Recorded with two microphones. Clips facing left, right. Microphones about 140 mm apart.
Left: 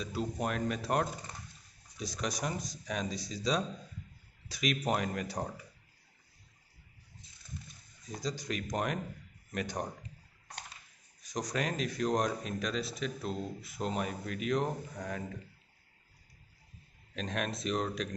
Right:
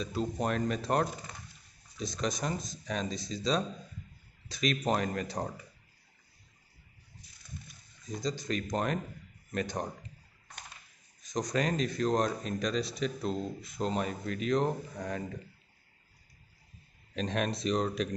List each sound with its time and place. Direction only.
0.0 s speech: 10° left (ahead or behind)
8.2 s speech: 10° left (ahead or behind)
11.2 s speech: 10° left (ahead or behind)
17.1 s speech: centre (ahead or behind)